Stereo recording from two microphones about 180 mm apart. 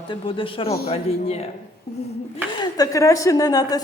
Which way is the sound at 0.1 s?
30° left (ahead or behind).